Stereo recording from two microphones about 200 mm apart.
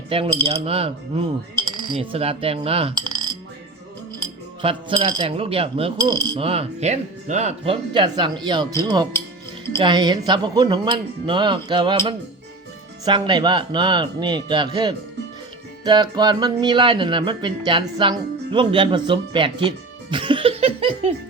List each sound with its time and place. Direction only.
0.1 s speech: 25° right (ahead or behind)
4.6 s speech: 25° right (ahead or behind)
15.8 s music: 20° right (ahead or behind)